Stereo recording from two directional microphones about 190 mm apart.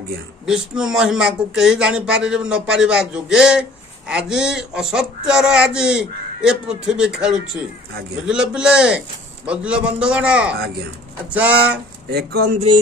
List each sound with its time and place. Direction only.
0.7 s speech: 5° right (ahead or behind)
12.1 s speech: 55° right (ahead or behind)